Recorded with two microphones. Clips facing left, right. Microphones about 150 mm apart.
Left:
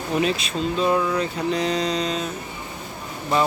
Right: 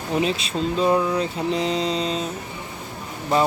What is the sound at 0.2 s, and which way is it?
Mantra, 30° right (ahead or behind).